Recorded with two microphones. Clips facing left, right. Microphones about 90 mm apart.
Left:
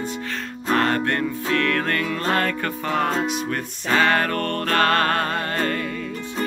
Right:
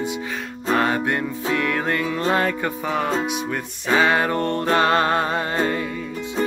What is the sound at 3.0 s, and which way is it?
Music, centre (ahead or behind).